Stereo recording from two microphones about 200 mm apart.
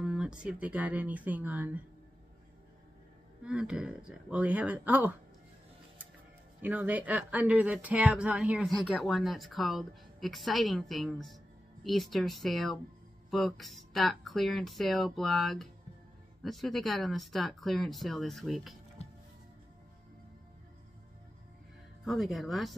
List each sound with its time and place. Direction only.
0.0 s speech: 5° right (ahead or behind)
3.4 s speech: 5° right (ahead or behind)
6.6 s speech: 10° right (ahead or behind)
19.0 s music: 30° left (ahead or behind)
22.0 s speech: centre (ahead or behind)